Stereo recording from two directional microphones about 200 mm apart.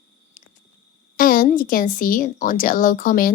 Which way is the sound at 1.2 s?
45° left (ahead or behind).